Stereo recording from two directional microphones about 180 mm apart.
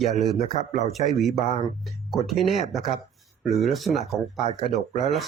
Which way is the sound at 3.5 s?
Centre (ahead or behind).